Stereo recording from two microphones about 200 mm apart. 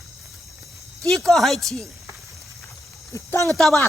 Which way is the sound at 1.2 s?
Centre (ahead or behind).